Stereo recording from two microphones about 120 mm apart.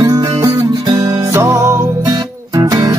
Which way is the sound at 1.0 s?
20° right (ahead or behind).